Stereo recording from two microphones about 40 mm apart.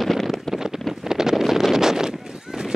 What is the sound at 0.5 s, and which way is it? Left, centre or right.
Wind noise, centre.